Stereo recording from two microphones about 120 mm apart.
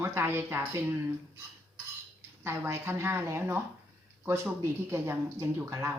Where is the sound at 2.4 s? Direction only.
20° right (ahead or behind).